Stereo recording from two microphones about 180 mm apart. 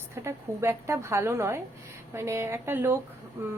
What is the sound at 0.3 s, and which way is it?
A woman's voice, 15° right (ahead or behind).